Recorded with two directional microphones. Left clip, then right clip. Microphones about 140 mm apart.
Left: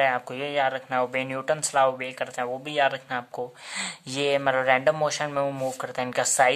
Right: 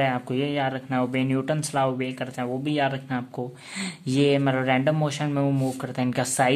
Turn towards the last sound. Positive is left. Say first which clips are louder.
# left 1 dB
turn(degrees=25)  # may be behind; listen again after turning